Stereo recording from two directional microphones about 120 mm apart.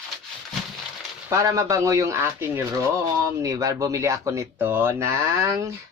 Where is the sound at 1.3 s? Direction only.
25° right (ahead or behind).